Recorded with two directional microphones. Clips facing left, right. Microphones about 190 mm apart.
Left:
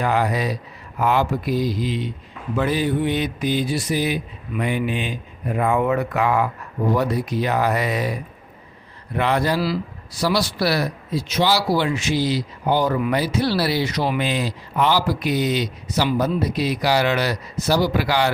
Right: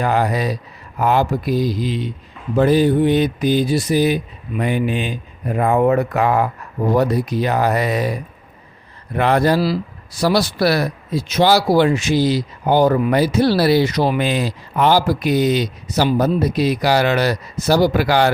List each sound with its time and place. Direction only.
0.0 s speech: 40° right (ahead or behind)
9.1 s speech: 50° right (ahead or behind)